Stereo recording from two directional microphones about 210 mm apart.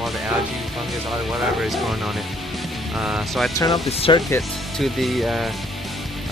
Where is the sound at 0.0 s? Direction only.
Centre (ahead or behind).